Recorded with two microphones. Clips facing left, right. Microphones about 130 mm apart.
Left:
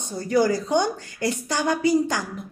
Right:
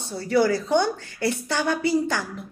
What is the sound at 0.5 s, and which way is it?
Speech, 15° left (ahead or behind).